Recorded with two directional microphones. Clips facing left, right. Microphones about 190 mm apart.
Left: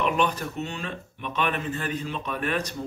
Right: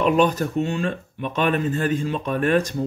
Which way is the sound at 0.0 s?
40° right (ahead or behind).